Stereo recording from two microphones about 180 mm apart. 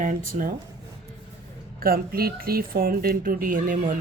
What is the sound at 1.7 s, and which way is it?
Speech, 55° right (ahead or behind).